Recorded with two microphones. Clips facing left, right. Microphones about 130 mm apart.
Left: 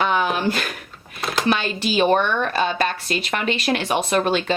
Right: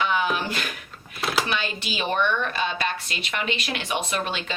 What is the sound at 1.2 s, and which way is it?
Computer keyboard, centre (ahead or behind).